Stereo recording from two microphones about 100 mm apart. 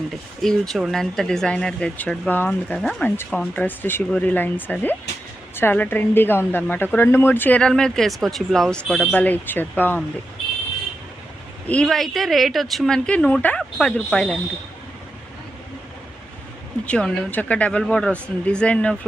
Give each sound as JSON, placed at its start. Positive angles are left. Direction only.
{"t": 0.1, "sound": "speech", "side_deg": 5}
{"t": 2.7, "sound": "speech", "side_deg": 5}
{"t": 3.5, "sound": "speech", "side_deg": 20}
{"t": 7.6, "sound": "speech", "side_deg": 5}
{"t": 11.7, "sound": "speech", "side_deg": 5}
{"t": 13.1, "sound": "speech", "side_deg": 10}
{"t": 16.8, "sound": "speech", "side_deg": 10}